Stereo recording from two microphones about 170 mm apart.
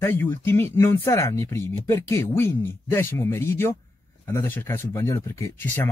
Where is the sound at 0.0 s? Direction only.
10° left (ahead or behind).